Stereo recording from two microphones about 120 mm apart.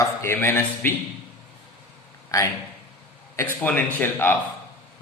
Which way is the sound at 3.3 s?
15° left (ahead or behind).